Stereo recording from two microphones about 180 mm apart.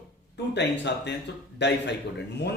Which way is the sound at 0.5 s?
75° left (ahead or behind).